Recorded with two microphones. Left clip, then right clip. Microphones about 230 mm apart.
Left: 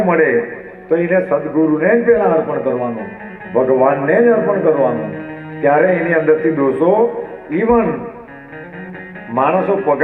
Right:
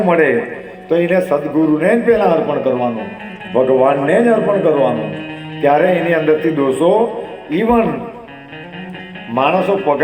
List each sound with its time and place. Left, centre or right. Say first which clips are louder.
0.0 s a man's voice: even; right
1.5 s a man's voice: even; right
1.8 s a man's voice: left 1 dB; right
9.3 s a man's voice: even; right